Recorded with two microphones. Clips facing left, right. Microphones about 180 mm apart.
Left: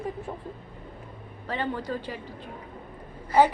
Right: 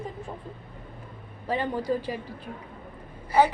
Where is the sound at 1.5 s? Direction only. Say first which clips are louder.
Right 3 dB; 10° right (ahead or behind).